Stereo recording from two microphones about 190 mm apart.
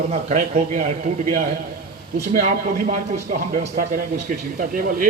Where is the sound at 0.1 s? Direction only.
35° right (ahead or behind).